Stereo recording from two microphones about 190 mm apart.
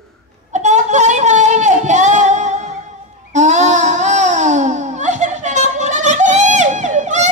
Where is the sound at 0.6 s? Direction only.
40° right (ahead or behind).